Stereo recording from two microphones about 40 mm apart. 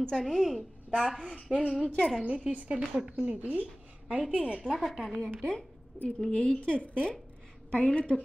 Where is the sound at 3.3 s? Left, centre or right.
Right.